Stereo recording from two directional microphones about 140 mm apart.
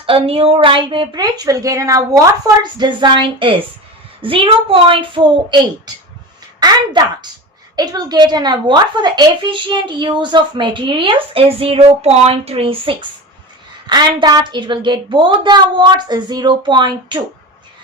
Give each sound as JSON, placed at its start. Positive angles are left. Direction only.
{"t": 0.0, "sound": "a woman's voice", "side_deg": -40}